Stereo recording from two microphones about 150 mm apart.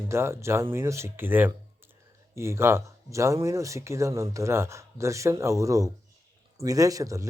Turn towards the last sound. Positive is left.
turn(degrees=-20)  # may be behind; listen again after turning